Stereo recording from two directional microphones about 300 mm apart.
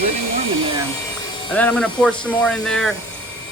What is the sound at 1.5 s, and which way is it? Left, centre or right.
Speech, centre.